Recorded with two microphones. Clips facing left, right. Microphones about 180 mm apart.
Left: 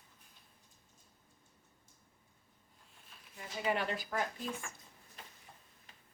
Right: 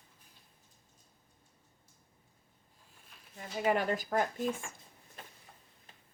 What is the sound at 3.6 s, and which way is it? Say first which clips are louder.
Speech: right 5 dB; 45° right (ahead or behind).